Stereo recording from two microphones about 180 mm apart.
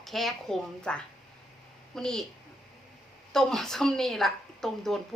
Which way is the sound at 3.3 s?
Centre (ahead or behind).